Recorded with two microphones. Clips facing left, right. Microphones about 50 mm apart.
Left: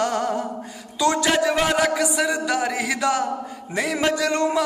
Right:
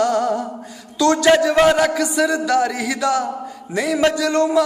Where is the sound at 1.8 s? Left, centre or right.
Centre.